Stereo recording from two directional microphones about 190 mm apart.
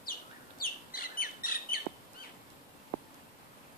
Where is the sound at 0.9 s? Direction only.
50° left (ahead or behind).